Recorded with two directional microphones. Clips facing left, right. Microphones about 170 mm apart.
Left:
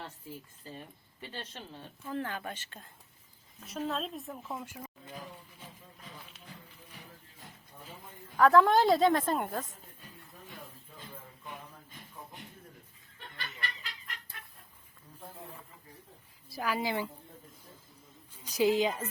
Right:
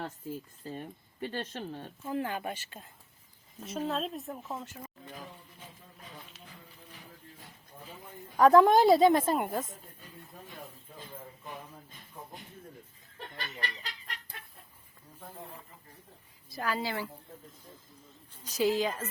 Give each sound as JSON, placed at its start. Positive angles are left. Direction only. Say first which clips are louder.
{"t": 0.6, "sound": "speech", "louder": "right 6 dB", "side_deg": -50}
{"t": 2.0, "sound": "a woman's voice", "louder": "right 3 dB", "side_deg": -10}
{"t": 4.6, "sound": "a woman's voice", "louder": "even", "side_deg": 10}
{"t": 8.4, "sound": "a woman's voice", "louder": "right 3 dB", "side_deg": -15}
{"t": 13.1, "sound": "chicken", "louder": "right 4 dB", "side_deg": -40}
{"t": 16.5, "sound": "a woman's voice", "louder": "left 1 dB", "side_deg": 10}
{"t": 18.4, "sound": "a woman's voice", "louder": "left 1 dB", "side_deg": 15}